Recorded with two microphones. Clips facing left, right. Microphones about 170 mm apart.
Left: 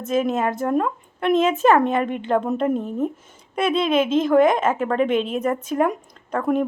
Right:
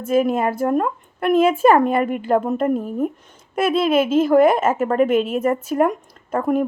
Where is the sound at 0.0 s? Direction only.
10° right (ahead or behind).